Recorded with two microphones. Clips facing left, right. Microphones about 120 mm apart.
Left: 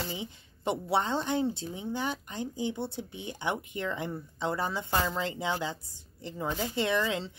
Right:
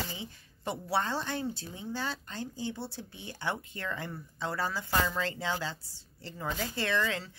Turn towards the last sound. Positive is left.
turn(degrees=20)  # may be behind; listen again after turning